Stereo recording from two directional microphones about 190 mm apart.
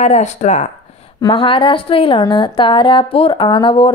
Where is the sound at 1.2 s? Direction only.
25° left (ahead or behind).